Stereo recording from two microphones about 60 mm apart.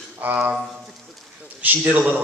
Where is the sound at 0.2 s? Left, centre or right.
Right.